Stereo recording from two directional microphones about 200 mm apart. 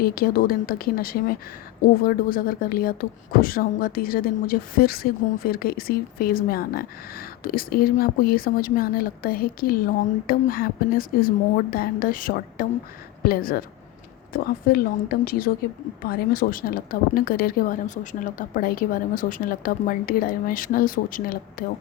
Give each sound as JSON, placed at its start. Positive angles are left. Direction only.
{"t": 0.0, "sound": "speech", "side_deg": 50}